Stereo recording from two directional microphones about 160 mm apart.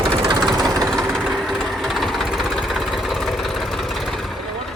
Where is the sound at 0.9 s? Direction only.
Centre (ahead or behind).